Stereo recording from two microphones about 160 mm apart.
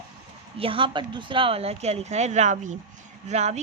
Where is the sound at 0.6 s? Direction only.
35° right (ahead or behind).